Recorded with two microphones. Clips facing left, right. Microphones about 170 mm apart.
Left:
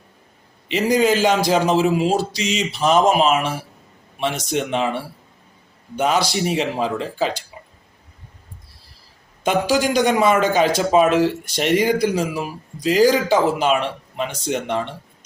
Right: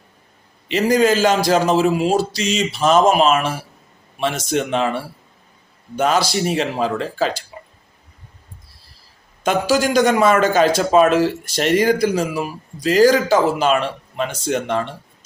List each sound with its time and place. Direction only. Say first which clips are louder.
1.0 s speech: right 1 dB; 15° left (ahead or behind)
6.0 s speech: right 1 dB; 15° left (ahead or behind)
9.4 s a man's voice: right 1 dB; 15° left (ahead or behind)